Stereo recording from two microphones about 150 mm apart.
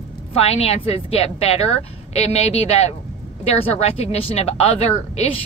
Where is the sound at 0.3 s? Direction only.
45° left (ahead or behind).